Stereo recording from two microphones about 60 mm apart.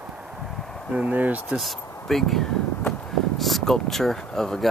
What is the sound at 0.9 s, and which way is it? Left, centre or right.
Speech, right.